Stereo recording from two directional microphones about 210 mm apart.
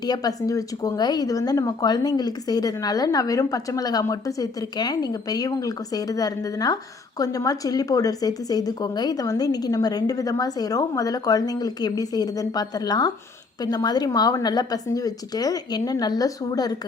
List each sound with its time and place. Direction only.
0.0 s a woman's voice: 20° left (ahead or behind)